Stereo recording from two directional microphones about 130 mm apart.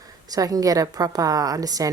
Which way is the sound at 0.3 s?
30° right (ahead or behind).